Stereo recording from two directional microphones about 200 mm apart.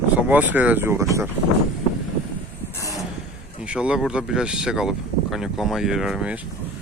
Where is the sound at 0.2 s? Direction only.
10° right (ahead or behind).